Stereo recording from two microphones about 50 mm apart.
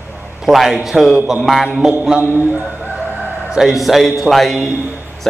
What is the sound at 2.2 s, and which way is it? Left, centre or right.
Speech, right.